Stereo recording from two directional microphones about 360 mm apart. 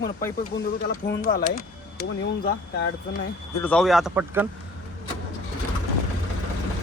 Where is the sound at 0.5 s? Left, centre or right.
Left.